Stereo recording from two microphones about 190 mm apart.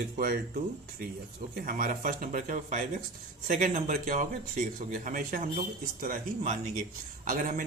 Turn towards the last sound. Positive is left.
turn(degrees=-45)  # may be behind; listen again after turning